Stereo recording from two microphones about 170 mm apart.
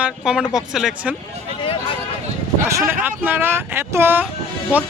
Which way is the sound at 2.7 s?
15° right (ahead or behind).